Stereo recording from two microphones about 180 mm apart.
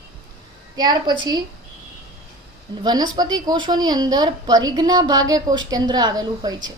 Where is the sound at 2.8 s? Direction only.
20° right (ahead or behind).